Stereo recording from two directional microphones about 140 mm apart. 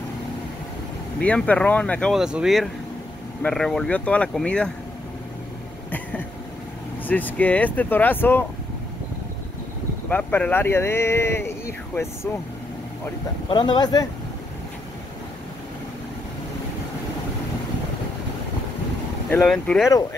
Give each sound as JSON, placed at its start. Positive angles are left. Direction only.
{"t": 1.2, "sound": "speech", "side_deg": 10}
{"t": 2.1, "sound": "speech", "side_deg": -5}
{"t": 7.1, "sound": "speech", "side_deg": 10}
{"t": 10.0, "sound": "speech", "side_deg": 10}
{"t": 13.5, "sound": "speech", "side_deg": 35}
{"t": 19.3, "sound": "speech", "side_deg": 5}